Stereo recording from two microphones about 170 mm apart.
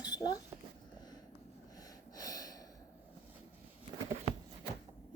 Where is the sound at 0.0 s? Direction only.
25° left (ahead or behind).